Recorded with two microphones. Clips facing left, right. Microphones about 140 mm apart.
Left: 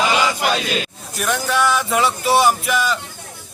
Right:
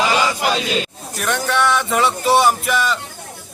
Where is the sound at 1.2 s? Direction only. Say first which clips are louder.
Even; centre (ahead or behind).